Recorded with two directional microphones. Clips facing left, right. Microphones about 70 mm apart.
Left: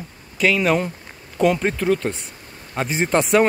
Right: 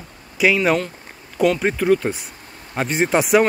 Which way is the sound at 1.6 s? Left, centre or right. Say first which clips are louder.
Right 3 dB; centre.